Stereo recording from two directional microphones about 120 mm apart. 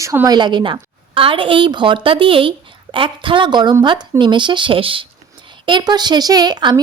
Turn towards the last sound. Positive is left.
turn(degrees=-35)  # may be behind; listen again after turning